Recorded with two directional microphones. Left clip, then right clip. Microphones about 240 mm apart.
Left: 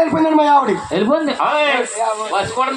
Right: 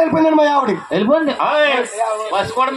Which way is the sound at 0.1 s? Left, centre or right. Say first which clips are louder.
Left 1 dB; right.